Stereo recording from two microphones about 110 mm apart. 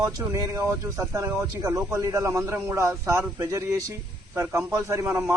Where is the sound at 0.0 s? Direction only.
30° right (ahead or behind).